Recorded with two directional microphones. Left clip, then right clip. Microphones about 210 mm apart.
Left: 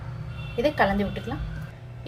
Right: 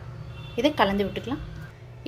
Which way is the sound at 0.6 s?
40° right (ahead or behind).